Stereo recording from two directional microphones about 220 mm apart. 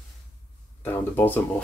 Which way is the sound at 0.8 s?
10° left (ahead or behind).